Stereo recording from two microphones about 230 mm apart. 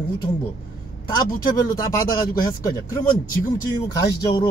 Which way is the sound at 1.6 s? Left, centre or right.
Centre.